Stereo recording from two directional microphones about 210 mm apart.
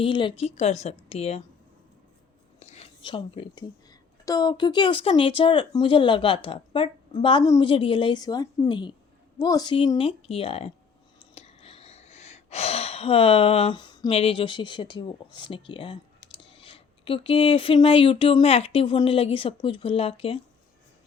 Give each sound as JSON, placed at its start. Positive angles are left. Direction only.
{"t": 0.0, "sound": "speech", "side_deg": 25}
{"t": 2.6, "sound": "a sound", "side_deg": 30}
{"t": 4.3, "sound": "speech", "side_deg": 20}